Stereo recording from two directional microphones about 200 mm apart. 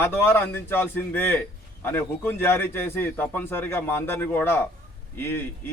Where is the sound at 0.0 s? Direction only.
10° left (ahead or behind).